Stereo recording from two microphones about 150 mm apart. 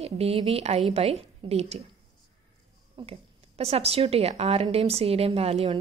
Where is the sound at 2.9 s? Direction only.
40° right (ahead or behind).